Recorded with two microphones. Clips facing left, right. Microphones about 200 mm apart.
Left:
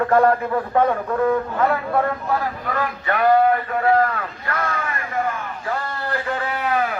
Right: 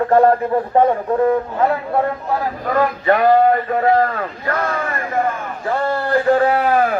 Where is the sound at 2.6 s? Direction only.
35° right (ahead or behind).